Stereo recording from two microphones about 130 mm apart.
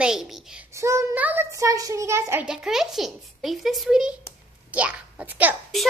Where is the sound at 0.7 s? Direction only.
20° right (ahead or behind).